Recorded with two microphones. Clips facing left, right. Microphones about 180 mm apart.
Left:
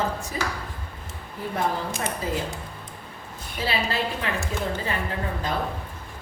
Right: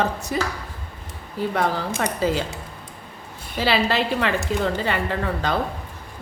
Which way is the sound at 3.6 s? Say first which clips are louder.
Right 6 dB; 80° right.